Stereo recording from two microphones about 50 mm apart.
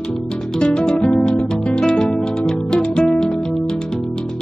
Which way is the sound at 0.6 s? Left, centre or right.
Centre.